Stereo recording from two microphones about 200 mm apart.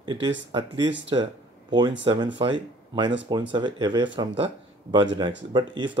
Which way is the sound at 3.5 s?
20° right (ahead or behind).